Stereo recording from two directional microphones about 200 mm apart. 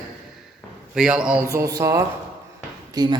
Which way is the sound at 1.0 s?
5° right (ahead or behind).